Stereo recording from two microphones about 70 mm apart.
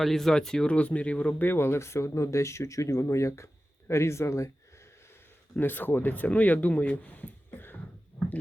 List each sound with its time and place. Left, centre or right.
0.0 s speech: centre; by 4.5 s left
5.5 s speech: left